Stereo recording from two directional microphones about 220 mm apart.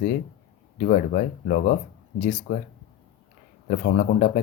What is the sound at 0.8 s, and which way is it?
Speech, 40° left (ahead or behind).